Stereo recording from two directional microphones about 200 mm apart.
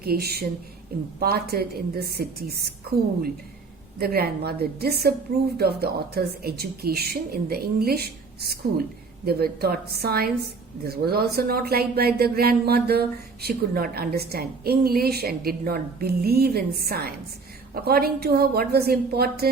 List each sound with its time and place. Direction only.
0.0 s a woman's voice: 50° right (ahead or behind)
4.0 s a woman's voice: 50° right (ahead or behind)